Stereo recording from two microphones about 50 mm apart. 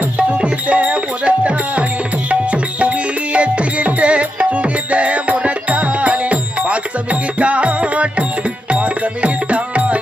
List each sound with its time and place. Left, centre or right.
0.2 s music: right
2.3 s tabla: right
3.3 s music: right